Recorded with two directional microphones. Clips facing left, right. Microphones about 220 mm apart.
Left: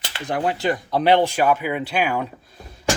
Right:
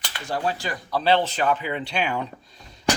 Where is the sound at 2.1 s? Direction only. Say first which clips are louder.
Left 3 dB; 50° left (ahead or behind).